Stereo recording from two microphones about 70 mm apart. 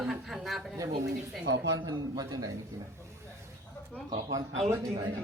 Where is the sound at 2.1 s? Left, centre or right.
Right.